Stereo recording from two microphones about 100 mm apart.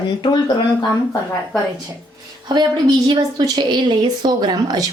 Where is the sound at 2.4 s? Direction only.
45° right (ahead or behind).